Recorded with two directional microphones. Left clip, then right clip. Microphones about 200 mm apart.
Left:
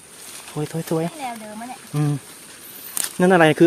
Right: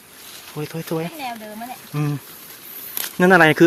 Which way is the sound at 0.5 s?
20° left (ahead or behind).